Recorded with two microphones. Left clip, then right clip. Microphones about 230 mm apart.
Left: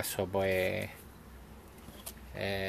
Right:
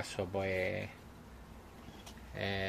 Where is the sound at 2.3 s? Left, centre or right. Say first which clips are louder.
Left 2 dB; centre.